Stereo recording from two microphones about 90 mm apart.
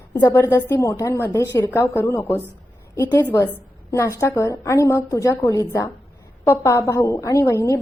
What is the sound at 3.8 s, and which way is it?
A woman's voice, 35° left (ahead or behind).